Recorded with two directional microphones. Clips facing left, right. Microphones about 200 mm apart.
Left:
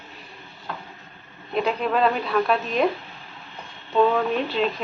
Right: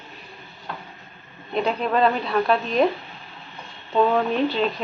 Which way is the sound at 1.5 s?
5° left (ahead or behind).